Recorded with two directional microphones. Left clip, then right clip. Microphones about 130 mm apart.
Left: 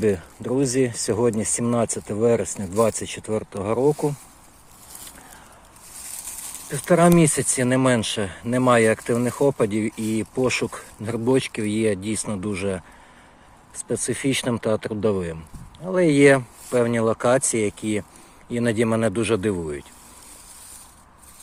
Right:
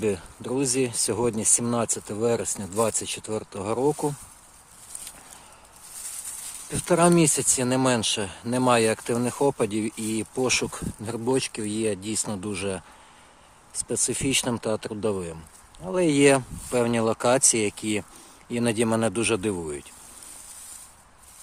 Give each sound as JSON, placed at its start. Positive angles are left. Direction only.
{"t": 0.0, "sound": "speech", "side_deg": -15}
{"t": 1.5, "sound": "speech", "side_deg": -35}
{"t": 2.0, "sound": "speech", "side_deg": -15}
{"t": 6.7, "sound": "speech", "side_deg": -20}
{"t": 13.8, "sound": "speech", "side_deg": -15}
{"t": 16.8, "sound": "speech", "side_deg": -30}